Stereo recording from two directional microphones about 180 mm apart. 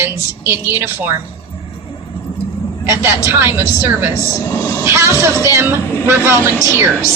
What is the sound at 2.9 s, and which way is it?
A woman's voice, 15° right (ahead or behind).